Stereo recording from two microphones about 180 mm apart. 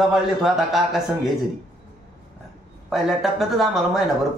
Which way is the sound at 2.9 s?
Centre (ahead or behind).